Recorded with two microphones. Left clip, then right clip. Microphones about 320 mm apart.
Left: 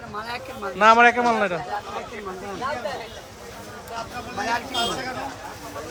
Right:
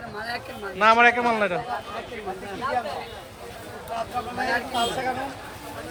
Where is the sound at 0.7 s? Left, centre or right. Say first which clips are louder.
Left 2 dB; centre.